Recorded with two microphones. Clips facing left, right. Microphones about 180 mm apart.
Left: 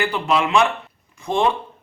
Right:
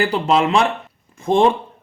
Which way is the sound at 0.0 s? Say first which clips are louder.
Right 4 dB; 40° right (ahead or behind).